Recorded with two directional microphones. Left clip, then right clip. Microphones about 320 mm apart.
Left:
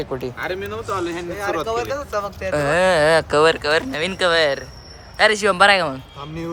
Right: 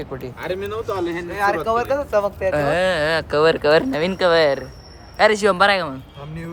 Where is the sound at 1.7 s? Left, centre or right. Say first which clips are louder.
Right 4 dB; right.